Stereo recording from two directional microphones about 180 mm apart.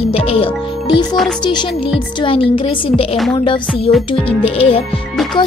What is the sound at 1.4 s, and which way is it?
A woman's voice, 25° left (ahead or behind).